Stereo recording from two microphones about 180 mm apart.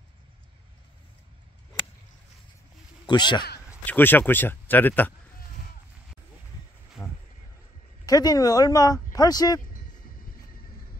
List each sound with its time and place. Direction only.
3.1 s speech: 25° left (ahead or behind)
3.8 s speech: 10° left (ahead or behind)
7.0 s boat: 15° left (ahead or behind)
8.0 s speech: 20° left (ahead or behind)